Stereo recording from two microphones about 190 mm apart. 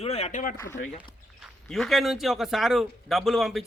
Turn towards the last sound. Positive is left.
turn(degrees=0)  # may be behind; listen again after turning